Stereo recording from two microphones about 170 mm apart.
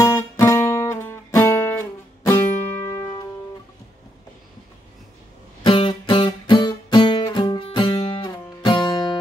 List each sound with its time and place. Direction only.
0.0 s music: 15° left (ahead or behind)
5.7 s music: 30° left (ahead or behind)